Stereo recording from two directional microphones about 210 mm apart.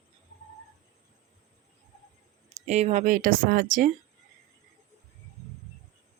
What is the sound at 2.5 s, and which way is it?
Speech, 30° right (ahead or behind).